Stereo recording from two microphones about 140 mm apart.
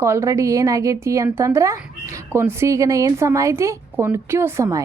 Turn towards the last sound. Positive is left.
turn(degrees=-20)  # may be behind; listen again after turning